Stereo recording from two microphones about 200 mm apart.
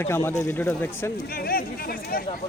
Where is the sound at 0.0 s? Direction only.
15° left (ahead or behind).